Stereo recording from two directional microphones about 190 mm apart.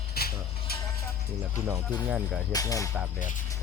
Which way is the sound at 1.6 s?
15° right (ahead or behind).